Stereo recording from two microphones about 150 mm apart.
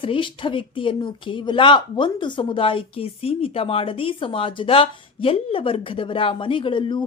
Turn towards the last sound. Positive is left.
turn(degrees=35)  # may be behind; listen again after turning